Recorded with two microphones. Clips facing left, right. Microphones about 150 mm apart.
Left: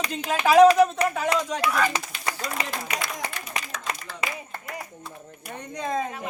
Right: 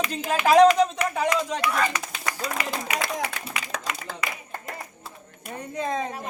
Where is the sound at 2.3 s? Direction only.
30° left (ahead or behind).